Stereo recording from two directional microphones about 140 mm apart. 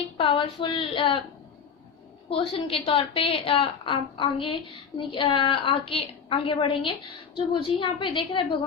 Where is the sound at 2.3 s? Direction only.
40° left (ahead or behind).